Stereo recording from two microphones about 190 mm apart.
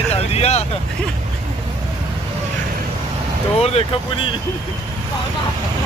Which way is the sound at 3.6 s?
30° left (ahead or behind).